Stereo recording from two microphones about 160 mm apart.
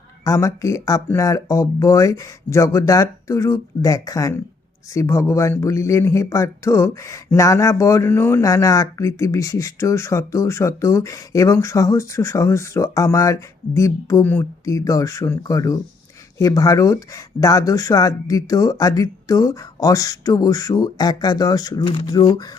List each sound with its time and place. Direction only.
0.3 s speech: 20° left (ahead or behind)